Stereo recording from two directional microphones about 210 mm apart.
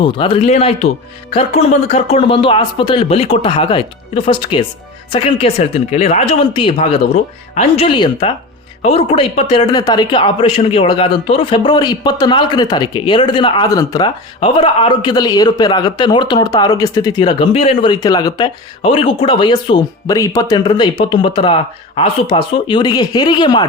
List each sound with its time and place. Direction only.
0.0 s speech: 25° left (ahead or behind)